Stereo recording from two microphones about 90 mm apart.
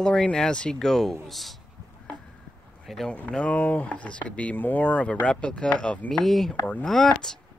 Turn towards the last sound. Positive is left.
turn(degrees=5)  # may be behind; listen again after turning